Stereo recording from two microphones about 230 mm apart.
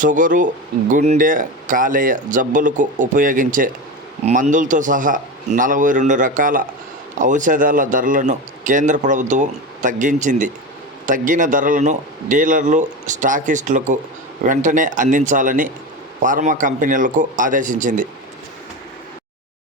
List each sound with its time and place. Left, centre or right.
0.0 s speech: right